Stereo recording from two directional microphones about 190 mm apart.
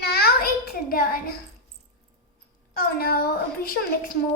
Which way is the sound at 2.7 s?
55° left (ahead or behind).